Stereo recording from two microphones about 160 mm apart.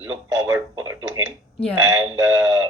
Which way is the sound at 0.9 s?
15° right (ahead or behind).